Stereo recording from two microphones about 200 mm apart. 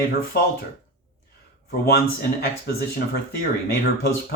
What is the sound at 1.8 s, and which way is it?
Speech, 50° left (ahead or behind).